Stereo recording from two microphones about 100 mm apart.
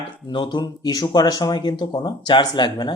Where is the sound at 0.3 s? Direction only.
50° left (ahead or behind).